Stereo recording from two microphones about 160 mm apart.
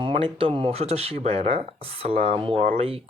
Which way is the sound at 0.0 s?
35° right (ahead or behind).